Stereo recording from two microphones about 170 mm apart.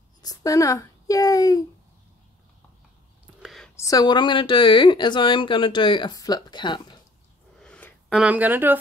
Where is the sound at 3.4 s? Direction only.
Centre (ahead or behind).